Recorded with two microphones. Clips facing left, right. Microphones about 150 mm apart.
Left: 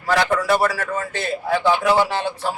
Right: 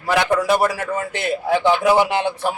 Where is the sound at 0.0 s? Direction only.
15° right (ahead or behind).